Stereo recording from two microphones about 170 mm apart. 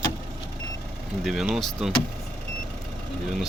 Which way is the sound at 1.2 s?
Centre (ahead or behind).